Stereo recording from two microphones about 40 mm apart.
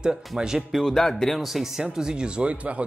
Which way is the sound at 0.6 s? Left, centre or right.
Centre.